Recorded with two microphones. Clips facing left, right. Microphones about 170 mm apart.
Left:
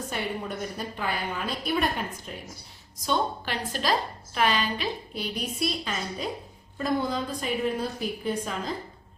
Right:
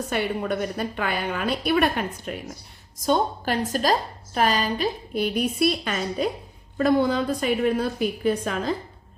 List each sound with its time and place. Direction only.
0.1 s a woman's voice: 75° right (ahead or behind)
3.1 s a woman's voice: 45° right (ahead or behind); by 8.7 s 70° right (ahead or behind)